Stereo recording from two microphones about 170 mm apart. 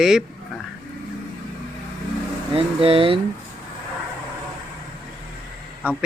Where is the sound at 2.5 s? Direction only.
35° right (ahead or behind).